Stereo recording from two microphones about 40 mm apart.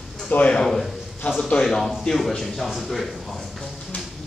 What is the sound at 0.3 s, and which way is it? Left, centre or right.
Speech, left.